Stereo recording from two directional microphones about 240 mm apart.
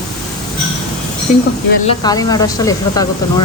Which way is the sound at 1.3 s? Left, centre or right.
Left.